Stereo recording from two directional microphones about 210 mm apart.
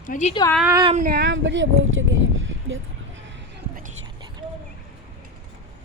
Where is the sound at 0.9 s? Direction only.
45° right (ahead or behind); by 1.7 s 60° right (ahead or behind).